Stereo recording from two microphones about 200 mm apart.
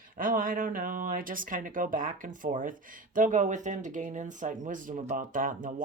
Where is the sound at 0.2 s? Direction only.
45° right (ahead or behind).